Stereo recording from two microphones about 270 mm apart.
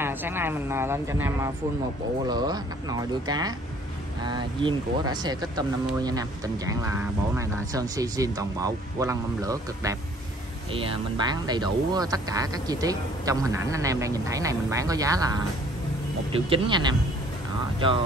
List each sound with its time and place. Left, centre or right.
0.0 s speech: centre